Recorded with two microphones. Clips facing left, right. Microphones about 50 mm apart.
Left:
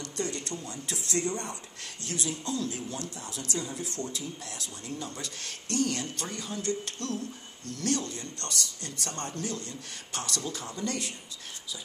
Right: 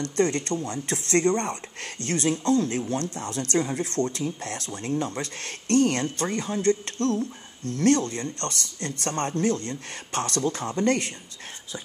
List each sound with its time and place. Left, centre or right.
0.0 s speech: right